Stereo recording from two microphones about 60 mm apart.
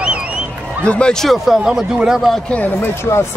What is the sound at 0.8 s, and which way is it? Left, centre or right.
Speech, centre.